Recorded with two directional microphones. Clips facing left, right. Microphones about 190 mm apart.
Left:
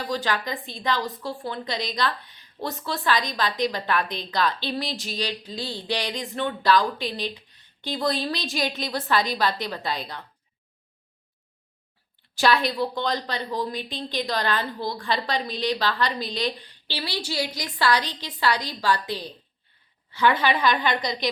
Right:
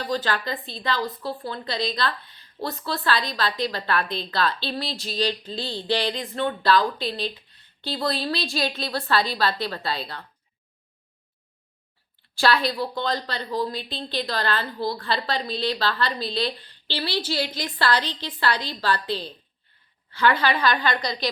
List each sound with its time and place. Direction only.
0.1 s a woman's voice: 15° left (ahead or behind)
12.3 s a woman's voice: 15° left (ahead or behind)